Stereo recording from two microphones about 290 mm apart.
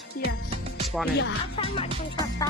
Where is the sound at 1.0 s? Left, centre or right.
Centre.